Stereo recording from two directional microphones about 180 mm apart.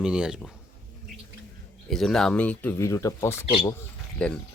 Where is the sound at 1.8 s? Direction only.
Centre (ahead or behind).